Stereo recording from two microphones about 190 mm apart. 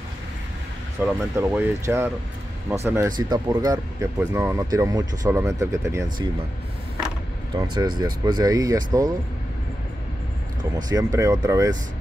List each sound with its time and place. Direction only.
1.0 s speech: 10° right (ahead or behind)
7.5 s speech: 20° right (ahead or behind)
10.9 s speech: 20° right (ahead or behind)